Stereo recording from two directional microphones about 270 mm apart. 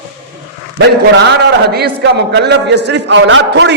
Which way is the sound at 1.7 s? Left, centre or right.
Right.